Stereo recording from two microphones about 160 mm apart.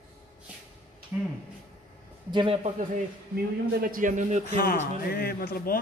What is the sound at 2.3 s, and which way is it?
Speech, 35° right (ahead or behind).